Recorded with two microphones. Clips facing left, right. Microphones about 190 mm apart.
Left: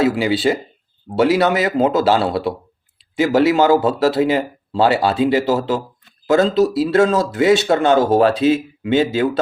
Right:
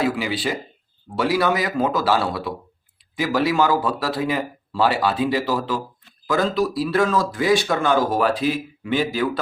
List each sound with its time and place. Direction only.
0.0 s speech: 25° left (ahead or behind)